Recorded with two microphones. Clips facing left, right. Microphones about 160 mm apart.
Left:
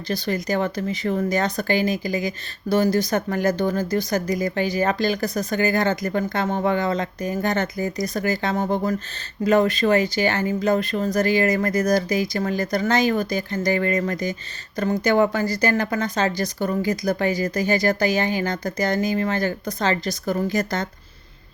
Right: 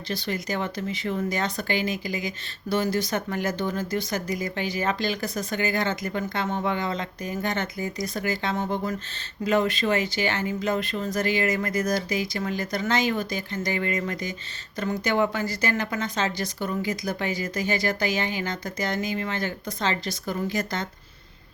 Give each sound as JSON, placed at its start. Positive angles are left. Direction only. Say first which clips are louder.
{"t": 0.1, "sound": "a woman's voice", "louder": "left 5 dB", "side_deg": 40}